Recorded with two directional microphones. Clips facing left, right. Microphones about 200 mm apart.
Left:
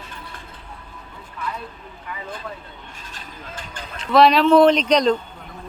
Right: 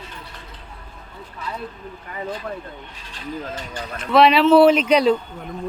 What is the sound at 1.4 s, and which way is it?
Speech, 50° left (ahead or behind).